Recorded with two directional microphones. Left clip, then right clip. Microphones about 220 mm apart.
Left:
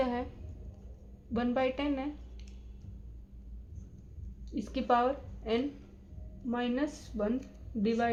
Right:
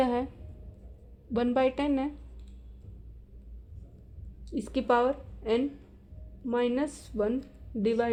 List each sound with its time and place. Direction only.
0.0 s a sound: 45° right (ahead or behind)
1.3 s a woman's voice: 45° right (ahead or behind)
4.5 s a woman's voice: 45° right (ahead or behind)